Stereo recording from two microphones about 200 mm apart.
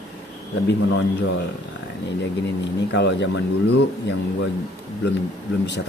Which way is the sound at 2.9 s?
65° left (ahead or behind).